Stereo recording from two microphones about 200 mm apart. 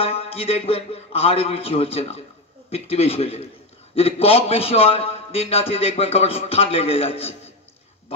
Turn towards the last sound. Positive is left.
turn(degrees=30)  # may be behind; listen again after turning